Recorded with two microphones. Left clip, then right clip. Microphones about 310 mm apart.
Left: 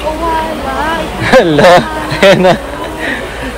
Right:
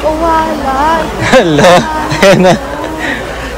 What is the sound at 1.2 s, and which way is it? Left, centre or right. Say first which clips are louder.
Speech: left 1 dB; centre.